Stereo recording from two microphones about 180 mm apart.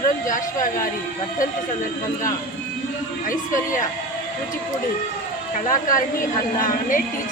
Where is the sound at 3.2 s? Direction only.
45° left (ahead or behind).